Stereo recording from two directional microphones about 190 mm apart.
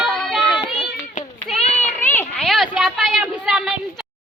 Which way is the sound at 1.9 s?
10° left (ahead or behind).